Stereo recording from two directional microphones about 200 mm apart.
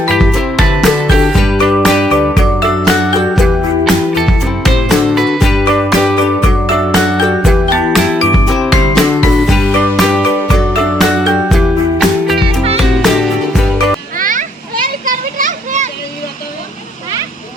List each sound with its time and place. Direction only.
0.1 s music: centre (ahead or behind)
12.4 s music: 30° right (ahead or behind)
14.2 s children playing: 40° right (ahead or behind)